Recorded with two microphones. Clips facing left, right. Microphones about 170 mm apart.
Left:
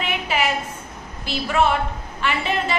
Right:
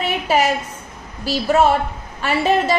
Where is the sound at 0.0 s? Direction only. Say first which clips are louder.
Right 5 dB; 40° right (ahead or behind).